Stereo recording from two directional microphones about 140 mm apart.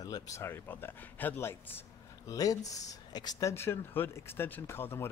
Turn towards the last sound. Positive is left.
turn(degrees=15)  # may be behind; listen again after turning